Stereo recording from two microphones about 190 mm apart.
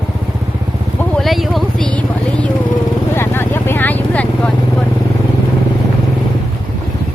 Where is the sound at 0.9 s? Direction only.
Centre (ahead or behind).